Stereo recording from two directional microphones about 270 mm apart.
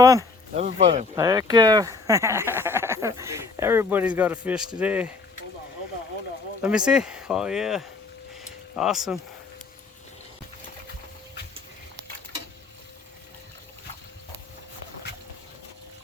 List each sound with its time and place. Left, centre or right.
0.0 s speech: centre
0.5 s speech: right
1.1 s speech: centre
6.6 s speech: centre